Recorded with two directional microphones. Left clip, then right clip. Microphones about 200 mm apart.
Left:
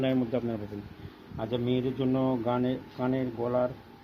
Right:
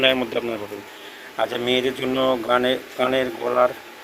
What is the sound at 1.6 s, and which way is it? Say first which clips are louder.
Speech: right 6 dB; centre (ahead or behind).